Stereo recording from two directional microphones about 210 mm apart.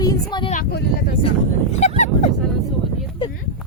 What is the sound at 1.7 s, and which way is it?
Speech, 35° left (ahead or behind).